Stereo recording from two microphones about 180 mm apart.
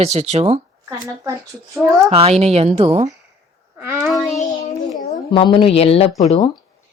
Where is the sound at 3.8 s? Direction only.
15° right (ahead or behind).